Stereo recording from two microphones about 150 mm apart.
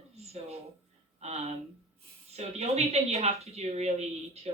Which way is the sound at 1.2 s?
45° right (ahead or behind).